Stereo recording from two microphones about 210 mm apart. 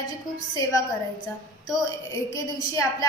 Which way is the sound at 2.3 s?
15° left (ahead or behind).